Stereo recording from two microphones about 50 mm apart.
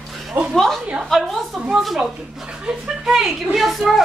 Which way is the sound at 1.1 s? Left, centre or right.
Centre.